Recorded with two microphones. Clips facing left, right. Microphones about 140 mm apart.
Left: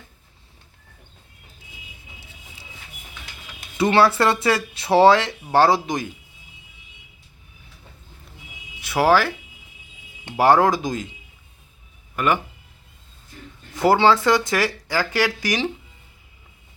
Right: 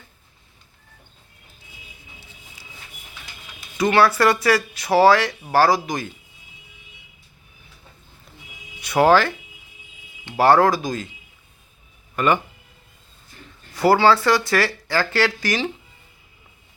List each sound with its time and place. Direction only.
3.8 s speech: 25° left (ahead or behind)
8.8 s speech: 5° left (ahead or behind)
10.3 s speech: 15° left (ahead or behind)
12.1 s speech: 5° left (ahead or behind)
13.7 s speech: 20° left (ahead or behind)